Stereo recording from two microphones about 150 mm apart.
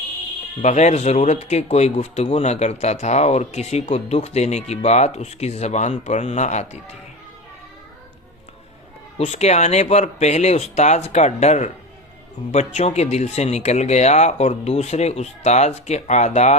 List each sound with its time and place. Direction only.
0.6 s speech: 50° left (ahead or behind)
9.1 s speech: 45° left (ahead or behind)